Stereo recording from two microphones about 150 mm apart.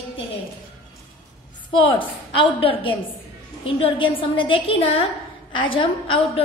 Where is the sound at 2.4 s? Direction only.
35° left (ahead or behind).